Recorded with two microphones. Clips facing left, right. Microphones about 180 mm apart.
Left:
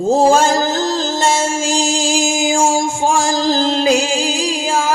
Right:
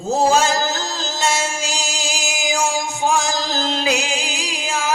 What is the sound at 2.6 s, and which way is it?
Music, 50° left (ahead or behind).